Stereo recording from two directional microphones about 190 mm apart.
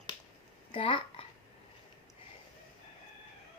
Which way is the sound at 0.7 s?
30° left (ahead or behind).